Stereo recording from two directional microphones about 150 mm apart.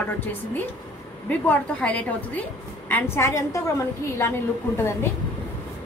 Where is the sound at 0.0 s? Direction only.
15° left (ahead or behind).